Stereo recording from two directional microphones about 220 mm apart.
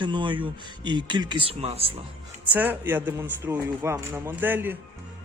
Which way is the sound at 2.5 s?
10° right (ahead or behind).